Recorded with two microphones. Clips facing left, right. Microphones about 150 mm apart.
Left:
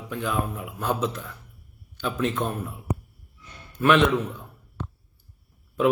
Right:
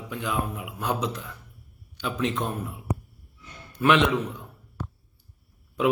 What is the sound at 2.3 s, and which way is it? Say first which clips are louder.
Speech: left 2 dB; 15° right (ahead or behind).